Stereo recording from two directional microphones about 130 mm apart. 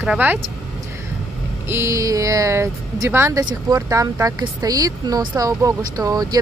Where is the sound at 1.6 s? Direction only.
20° right (ahead or behind).